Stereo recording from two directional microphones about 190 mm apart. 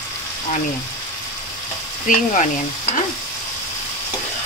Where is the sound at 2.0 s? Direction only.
45° left (ahead or behind).